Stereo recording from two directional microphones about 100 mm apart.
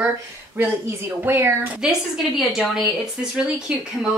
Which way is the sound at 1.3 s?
20° right (ahead or behind).